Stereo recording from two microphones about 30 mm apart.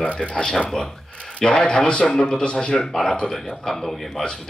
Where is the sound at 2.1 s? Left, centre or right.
Left.